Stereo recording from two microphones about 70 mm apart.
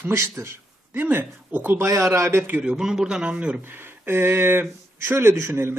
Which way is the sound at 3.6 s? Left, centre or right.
Right.